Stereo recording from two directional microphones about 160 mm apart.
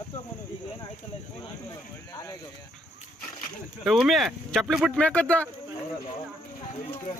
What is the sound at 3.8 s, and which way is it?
Speech, centre (ahead or behind).